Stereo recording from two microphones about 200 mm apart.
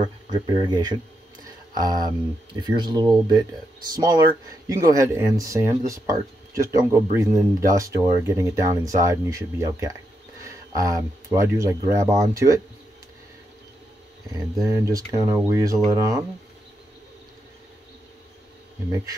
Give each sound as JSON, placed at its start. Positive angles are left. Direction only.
{"t": 0.0, "sound": "speech", "side_deg": -20}
{"t": 14.3, "sound": "speech", "side_deg": -15}